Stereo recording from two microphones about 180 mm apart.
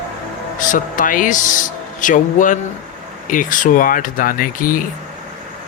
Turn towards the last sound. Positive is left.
turn(degrees=50)  # may be behind; listen again after turning